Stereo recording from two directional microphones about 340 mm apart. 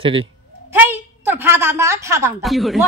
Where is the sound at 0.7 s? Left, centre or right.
Centre.